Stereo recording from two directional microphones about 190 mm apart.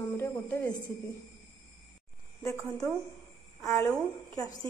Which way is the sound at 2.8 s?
15° left (ahead or behind).